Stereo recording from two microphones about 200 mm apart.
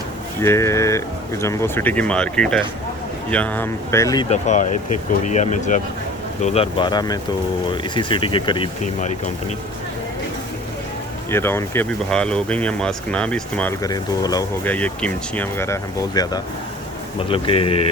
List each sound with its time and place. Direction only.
0.4 s speech: 15° left (ahead or behind)
4.3 s speech: 35° left (ahead or behind)
11.3 s speech: 10° left (ahead or behind)
14.6 s speech: 5° left (ahead or behind); by 17.8 s 25° left (ahead or behind)